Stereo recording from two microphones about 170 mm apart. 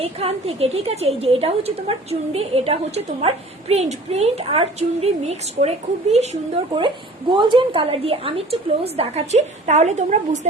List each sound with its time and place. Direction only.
0.0 s a woman's voice: 35° right (ahead or behind)